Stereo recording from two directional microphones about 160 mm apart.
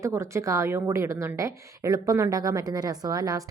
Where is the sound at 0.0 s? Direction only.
20° right (ahead or behind).